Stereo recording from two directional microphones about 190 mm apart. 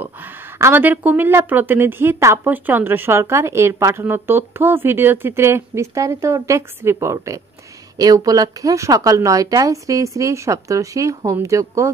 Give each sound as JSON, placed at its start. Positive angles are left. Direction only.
{"t": 0.0, "sound": "speech", "side_deg": -10}